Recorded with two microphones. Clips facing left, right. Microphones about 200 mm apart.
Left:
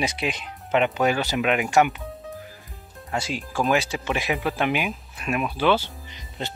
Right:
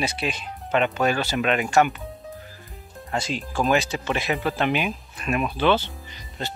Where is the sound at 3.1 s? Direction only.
10° left (ahead or behind).